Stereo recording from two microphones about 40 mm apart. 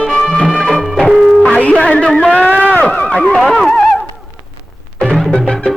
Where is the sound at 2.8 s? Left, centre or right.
Left.